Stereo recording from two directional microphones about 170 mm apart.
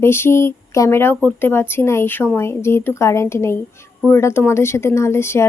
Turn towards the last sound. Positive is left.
turn(degrees=15)  # may be behind; listen again after turning